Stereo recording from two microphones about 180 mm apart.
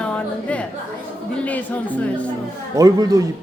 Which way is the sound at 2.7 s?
20° right (ahead or behind).